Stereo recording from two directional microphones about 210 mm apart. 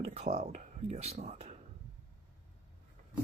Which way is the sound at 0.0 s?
30° right (ahead or behind).